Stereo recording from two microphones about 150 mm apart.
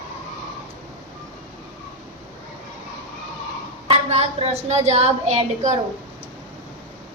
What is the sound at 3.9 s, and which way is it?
A woman's voice, 40° right (ahead or behind).